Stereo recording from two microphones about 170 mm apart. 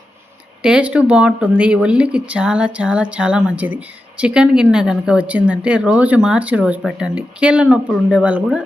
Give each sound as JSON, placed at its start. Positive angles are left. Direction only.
{"t": 0.6, "sound": "speech", "side_deg": -5}